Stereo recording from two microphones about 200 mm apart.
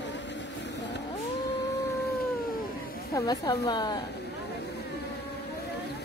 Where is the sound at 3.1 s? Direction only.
20° left (ahead or behind).